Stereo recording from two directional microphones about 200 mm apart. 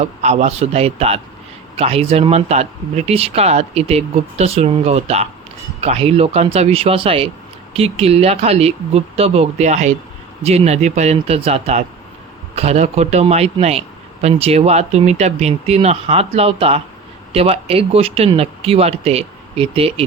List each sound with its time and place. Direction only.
0.2 s a man's voice: 35° right (ahead or behind)